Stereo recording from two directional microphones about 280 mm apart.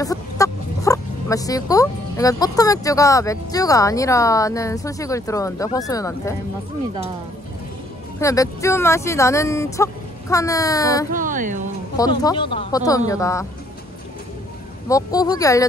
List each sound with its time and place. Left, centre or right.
0.0 s speech: centre
8.2 s speech: centre
11.1 s speech: right
12.0 s speech: centre
14.9 s speech: centre